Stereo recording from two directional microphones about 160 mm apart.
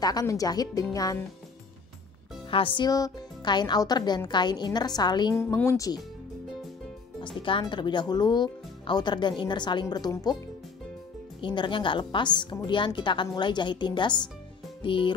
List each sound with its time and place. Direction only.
0.0 s speech: 25° left (ahead or behind)
2.5 s speech: 30° left (ahead or behind)
5.4 s speech: 15° left (ahead or behind)
7.3 s speech: 30° left (ahead or behind)
11.4 s speech: 30° left (ahead or behind)
14.8 s music: 30° left (ahead or behind)